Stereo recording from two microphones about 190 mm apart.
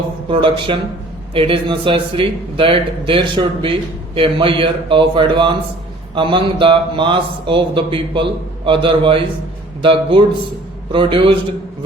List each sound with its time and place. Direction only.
0.3 s speech: 25° right (ahead or behind)